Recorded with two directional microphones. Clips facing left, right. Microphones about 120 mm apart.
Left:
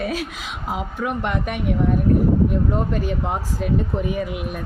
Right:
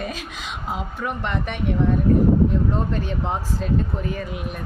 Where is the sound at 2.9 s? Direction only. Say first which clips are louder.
Left 2 dB; 5° left (ahead or behind).